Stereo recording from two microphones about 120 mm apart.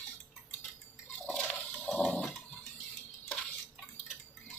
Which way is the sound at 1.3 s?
10° left (ahead or behind).